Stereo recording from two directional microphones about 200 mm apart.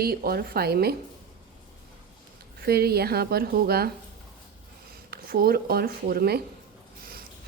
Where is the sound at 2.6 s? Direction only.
50° right (ahead or behind).